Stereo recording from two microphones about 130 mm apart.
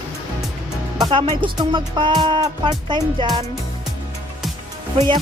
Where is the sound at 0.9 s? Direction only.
30° right (ahead or behind).